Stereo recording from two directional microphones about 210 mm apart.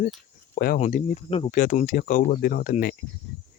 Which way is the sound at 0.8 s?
35° left (ahead or behind).